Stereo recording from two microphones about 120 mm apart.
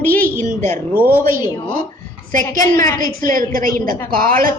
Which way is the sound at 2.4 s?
30° left (ahead or behind).